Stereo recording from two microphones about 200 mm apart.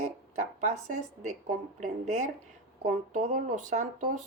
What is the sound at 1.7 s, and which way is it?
Speech, 35° right (ahead or behind).